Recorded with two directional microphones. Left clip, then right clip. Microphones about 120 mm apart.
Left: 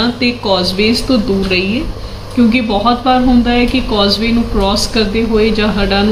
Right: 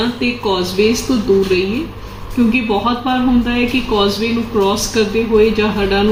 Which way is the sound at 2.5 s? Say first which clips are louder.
Left 3 dB; 35° left (ahead or behind).